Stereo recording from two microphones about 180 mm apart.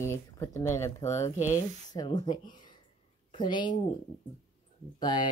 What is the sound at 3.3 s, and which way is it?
Speech, 25° left (ahead or behind).